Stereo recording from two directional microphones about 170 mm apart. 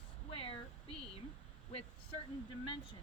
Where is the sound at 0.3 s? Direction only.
35° left (ahead or behind).